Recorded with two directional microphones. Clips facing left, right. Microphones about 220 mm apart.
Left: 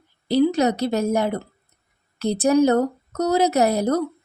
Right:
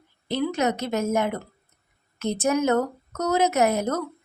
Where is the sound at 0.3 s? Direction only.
35° left (ahead or behind).